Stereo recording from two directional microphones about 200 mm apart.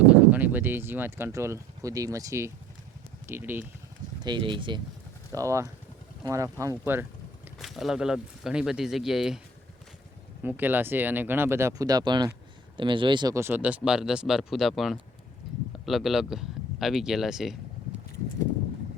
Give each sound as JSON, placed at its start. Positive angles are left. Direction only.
{"t": 0.1, "sound": "speech", "side_deg": -10}
{"t": 4.2, "sound": "speech", "side_deg": -25}
{"t": 10.4, "sound": "speech", "side_deg": -10}
{"t": 15.4, "sound": "a sound", "side_deg": 0}
{"t": 15.9, "sound": "speech", "side_deg": 0}